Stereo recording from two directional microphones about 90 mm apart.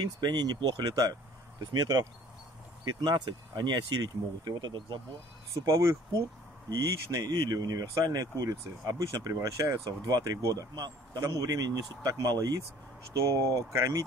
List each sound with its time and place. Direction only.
0.2 s speech: 50° right (ahead or behind)
5.7 s speech: 35° right (ahead or behind)